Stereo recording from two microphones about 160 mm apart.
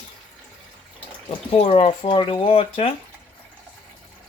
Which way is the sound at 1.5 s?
40° left (ahead or behind).